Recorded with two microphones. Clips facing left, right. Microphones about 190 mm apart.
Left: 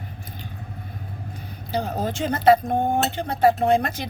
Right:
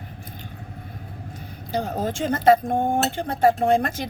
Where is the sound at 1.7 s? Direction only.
50° right (ahead or behind).